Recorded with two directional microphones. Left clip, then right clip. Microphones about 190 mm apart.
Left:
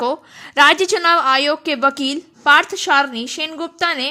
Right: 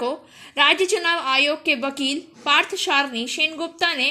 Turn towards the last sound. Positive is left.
turn(degrees=40)  # may be behind; listen again after turning